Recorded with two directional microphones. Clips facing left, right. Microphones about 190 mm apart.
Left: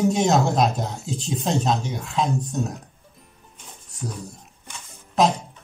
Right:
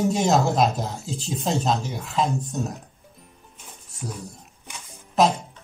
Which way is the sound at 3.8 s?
Centre (ahead or behind).